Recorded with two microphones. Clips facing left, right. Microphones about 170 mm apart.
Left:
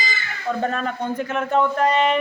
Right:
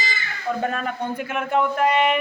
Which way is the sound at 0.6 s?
10° right (ahead or behind).